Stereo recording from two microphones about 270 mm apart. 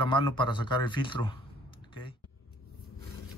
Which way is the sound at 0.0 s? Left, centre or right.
Centre.